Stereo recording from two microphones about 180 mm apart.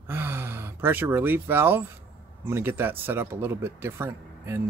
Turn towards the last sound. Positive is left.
turn(degrees=-15)  # may be behind; listen again after turning